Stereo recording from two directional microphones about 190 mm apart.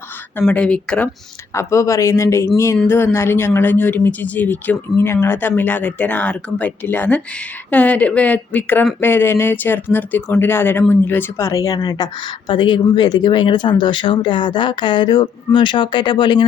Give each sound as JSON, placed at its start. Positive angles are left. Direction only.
{"t": 0.3, "sound": "speech", "side_deg": 10}